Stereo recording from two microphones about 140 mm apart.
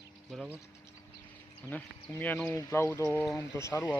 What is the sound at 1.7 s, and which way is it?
Speech, 10° left (ahead or behind).